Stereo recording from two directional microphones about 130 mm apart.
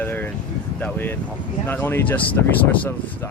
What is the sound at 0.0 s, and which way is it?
Vehicle, 15° left (ahead or behind).